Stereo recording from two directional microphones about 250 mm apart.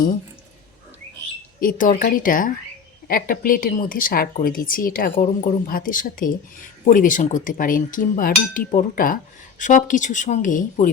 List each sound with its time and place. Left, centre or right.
1.6 s speech: left